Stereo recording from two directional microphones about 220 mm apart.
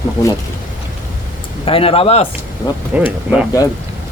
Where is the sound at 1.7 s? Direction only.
25° left (ahead or behind).